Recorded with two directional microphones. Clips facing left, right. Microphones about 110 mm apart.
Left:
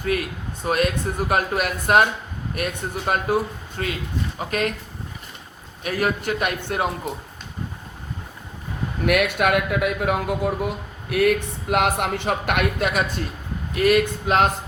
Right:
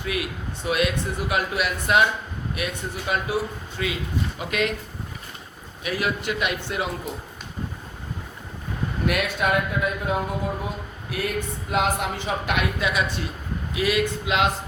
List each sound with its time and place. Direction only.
0.0 s speech: 45° left (ahead or behind)
5.8 s speech: 45° left (ahead or behind)
9.0 s speech: 65° left (ahead or behind); by 14.4 s 45° left (ahead or behind)